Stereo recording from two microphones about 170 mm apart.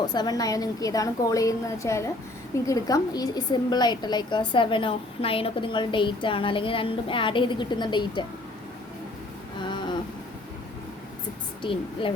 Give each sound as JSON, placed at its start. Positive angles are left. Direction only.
{"t": 0.0, "sound": "a woman's voice", "side_deg": 25}
{"t": 9.6, "sound": "a sound", "side_deg": 30}
{"t": 11.6, "sound": "a woman's voice", "side_deg": 30}